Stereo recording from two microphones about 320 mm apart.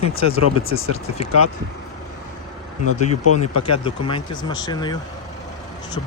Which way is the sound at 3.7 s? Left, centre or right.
Centre.